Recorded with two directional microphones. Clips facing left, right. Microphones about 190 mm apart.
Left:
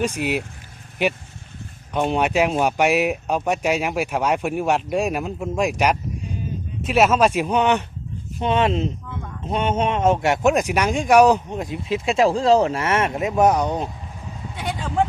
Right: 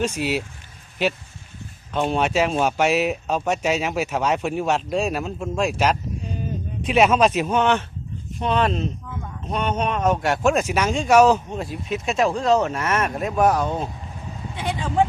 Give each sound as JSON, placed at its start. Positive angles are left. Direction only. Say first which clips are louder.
{"t": 1.9, "sound": "speech", "louder": "left 1 dB", "side_deg": 15}
{"t": 11.9, "sound": "speech", "louder": "left 3 dB", "side_deg": 30}
{"t": 14.5, "sound": "vehicle", "louder": "right 1 dB", "side_deg": 0}